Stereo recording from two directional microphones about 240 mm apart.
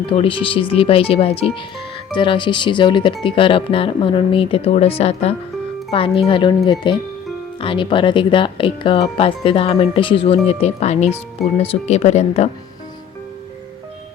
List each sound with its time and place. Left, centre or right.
0.1 s speech: left